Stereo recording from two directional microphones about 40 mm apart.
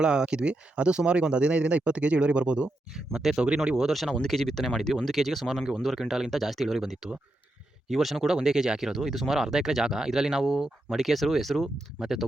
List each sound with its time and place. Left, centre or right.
0.0 s speech: right
2.9 s speech: centre
3.3 s speech: right
3.8 s speech: centre
4.3 s speech: centre